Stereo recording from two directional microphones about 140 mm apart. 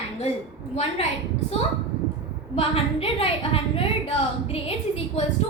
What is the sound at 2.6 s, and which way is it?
A woman's voice, 45° left (ahead or behind).